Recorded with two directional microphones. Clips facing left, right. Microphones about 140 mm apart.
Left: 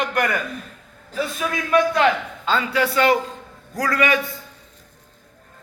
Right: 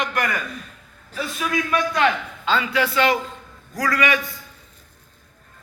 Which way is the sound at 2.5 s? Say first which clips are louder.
Left 1 dB; 35° left (ahead or behind).